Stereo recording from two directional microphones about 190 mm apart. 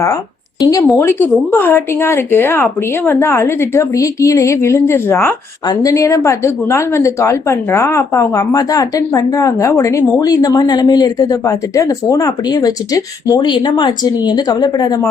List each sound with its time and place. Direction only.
0.6 s speech: 20° left (ahead or behind)